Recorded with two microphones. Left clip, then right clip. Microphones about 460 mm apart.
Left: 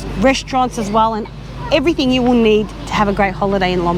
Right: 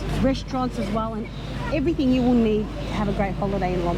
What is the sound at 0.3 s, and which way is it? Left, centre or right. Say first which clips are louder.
Speech: left 12 dB; left.